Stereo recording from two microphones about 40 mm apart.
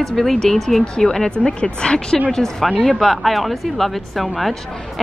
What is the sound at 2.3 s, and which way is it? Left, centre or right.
Speech, centre.